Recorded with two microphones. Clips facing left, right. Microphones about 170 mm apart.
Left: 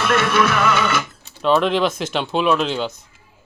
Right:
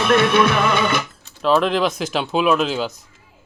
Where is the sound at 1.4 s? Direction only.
Centre (ahead or behind).